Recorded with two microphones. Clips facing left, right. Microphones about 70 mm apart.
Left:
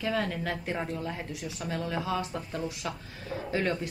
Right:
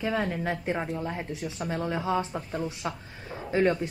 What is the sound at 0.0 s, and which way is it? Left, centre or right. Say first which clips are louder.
A woman's voice: right 2 dB; right.